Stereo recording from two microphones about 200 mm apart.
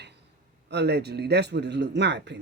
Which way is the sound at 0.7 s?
55° right (ahead or behind).